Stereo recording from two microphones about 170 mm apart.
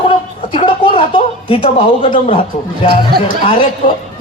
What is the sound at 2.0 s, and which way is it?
Speech, 30° left (ahead or behind).